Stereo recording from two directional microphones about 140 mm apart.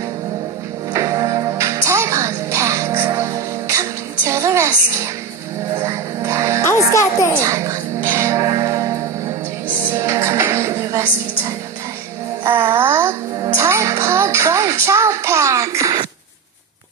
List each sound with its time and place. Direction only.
0.9 s music: 25° right (ahead or behind)
6.7 s music: 20° left (ahead or behind)
7.4 s music: 25° right (ahead or behind)
12.4 s music: 15° right (ahead or behind)